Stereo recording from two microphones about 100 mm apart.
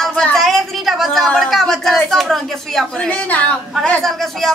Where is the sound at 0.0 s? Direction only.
10° left (ahead or behind).